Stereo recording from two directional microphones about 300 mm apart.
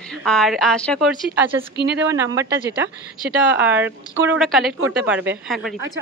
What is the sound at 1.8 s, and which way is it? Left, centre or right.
Speech, right.